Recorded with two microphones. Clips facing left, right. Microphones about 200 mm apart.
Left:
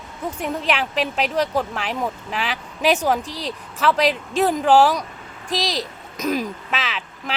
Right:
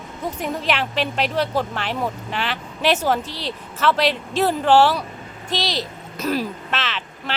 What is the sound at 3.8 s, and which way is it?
Speech, centre (ahead or behind).